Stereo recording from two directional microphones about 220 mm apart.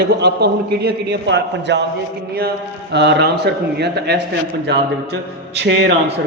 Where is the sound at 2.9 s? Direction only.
50° right (ahead or behind).